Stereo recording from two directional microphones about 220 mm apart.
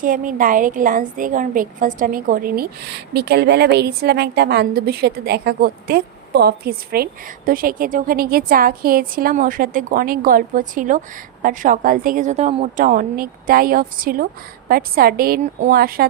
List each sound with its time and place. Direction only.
0.0 s a woman's voice: 40° right (ahead or behind)
12.7 s a woman's voice: 40° right (ahead or behind)